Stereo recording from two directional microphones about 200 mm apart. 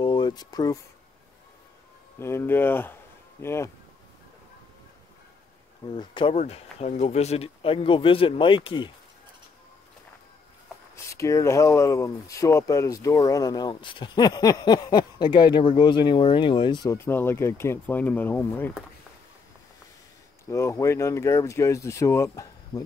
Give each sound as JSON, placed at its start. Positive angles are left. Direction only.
{"t": 0.0, "sound": "a sound", "side_deg": 20}
{"t": 2.1, "sound": "speech", "side_deg": 15}
{"t": 5.9, "sound": "speech", "side_deg": 25}
{"t": 11.1, "sound": "speech", "side_deg": 15}
{"t": 20.4, "sound": "speech", "side_deg": 15}